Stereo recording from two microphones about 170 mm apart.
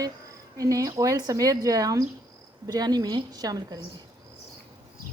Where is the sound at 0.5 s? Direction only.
20° right (ahead or behind).